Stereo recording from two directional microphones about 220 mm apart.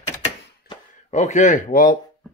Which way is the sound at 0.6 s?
30° left (ahead or behind).